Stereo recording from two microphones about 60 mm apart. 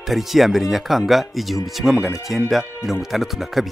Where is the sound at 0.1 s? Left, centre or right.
Centre.